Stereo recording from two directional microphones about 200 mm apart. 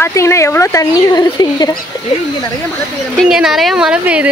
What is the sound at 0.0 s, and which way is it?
Speech, 15° left (ahead or behind).